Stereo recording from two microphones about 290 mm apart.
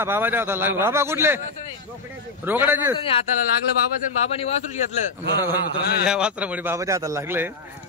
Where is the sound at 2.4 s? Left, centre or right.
Centre.